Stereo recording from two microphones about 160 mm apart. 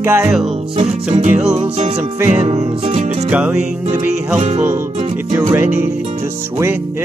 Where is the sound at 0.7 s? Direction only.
45° right (ahead or behind).